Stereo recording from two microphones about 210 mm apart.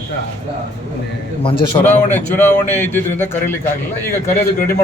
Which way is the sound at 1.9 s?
10° left (ahead or behind).